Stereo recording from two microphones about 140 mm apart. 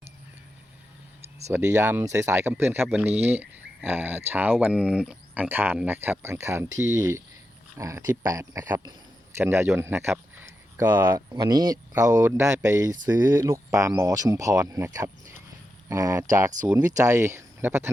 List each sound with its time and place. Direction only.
1.5 s speech: 20° right (ahead or behind)
9.4 s speech: 15° right (ahead or behind)
11.3 s speech: 30° right (ahead or behind)